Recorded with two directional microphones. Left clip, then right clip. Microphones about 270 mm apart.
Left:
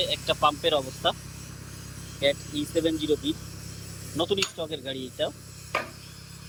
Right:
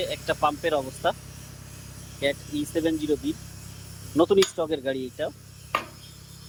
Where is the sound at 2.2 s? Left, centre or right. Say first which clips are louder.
Left 2 dB; centre.